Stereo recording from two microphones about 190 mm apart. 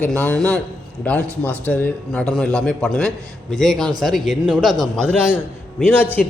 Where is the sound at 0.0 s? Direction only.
10° left (ahead or behind).